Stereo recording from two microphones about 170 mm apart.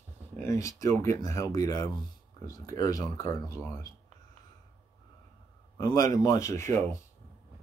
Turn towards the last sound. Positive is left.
turn(degrees=15)  # may be behind; listen again after turning